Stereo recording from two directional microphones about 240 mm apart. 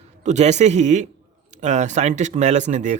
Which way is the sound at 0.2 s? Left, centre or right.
Right.